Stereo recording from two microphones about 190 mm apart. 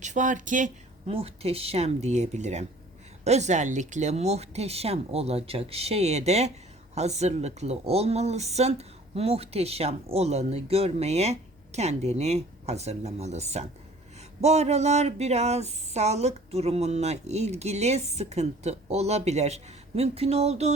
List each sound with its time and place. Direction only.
0.0 s speech: 40° right (ahead or behind)